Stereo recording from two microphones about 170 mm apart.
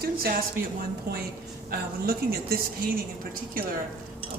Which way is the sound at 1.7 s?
65° right (ahead or behind).